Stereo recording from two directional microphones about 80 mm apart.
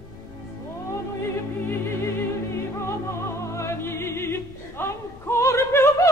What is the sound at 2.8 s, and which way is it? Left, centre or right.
Music, left.